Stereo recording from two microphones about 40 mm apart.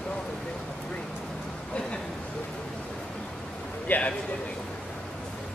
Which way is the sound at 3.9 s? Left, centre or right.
Left.